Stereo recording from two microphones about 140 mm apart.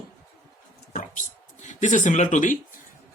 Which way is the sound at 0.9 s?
60° left (ahead or behind).